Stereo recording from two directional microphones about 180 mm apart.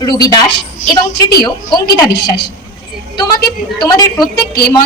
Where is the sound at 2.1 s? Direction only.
60° left (ahead or behind).